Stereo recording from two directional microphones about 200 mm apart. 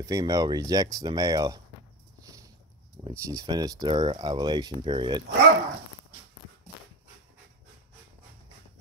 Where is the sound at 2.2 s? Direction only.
15° right (ahead or behind).